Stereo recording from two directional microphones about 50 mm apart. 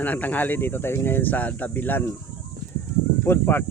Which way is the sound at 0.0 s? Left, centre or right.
Left.